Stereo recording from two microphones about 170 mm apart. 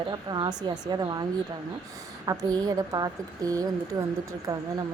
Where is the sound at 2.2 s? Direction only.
20° right (ahead or behind).